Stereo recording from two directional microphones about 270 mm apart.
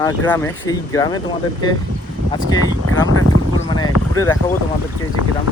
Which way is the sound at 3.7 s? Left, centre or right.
Centre.